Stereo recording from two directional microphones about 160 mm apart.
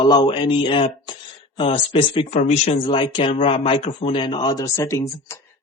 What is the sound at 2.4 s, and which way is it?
Speech, 55° left (ahead or behind).